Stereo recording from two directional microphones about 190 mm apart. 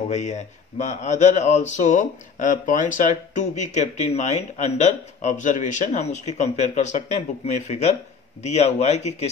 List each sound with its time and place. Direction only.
0.1 s speech: 40° left (ahead or behind)